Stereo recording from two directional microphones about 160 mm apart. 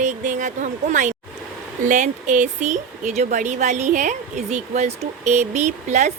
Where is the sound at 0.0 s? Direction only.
50° right (ahead or behind).